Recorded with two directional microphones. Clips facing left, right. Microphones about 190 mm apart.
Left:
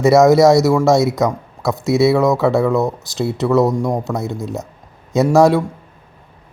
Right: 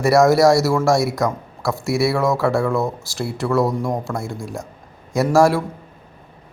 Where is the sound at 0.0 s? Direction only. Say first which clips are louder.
Left 4 dB; 20° left (ahead or behind).